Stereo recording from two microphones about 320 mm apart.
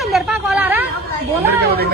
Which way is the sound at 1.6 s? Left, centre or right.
Right.